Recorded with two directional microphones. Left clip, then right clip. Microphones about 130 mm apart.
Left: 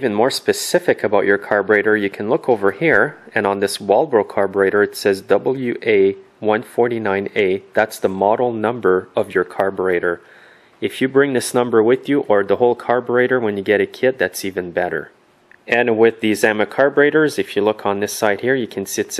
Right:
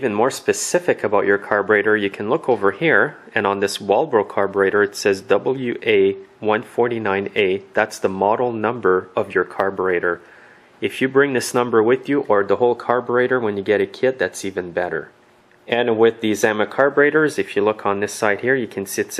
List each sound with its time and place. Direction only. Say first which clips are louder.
0.0 s speech: left 2 dB; 30° left (ahead or behind)
3.6 s speech: left 2 dB; 15° left (ahead or behind)
4.0 s speech: left 2 dB; 30° left (ahead or behind)